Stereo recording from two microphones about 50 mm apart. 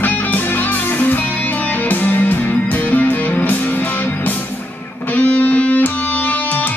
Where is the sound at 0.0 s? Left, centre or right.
Left.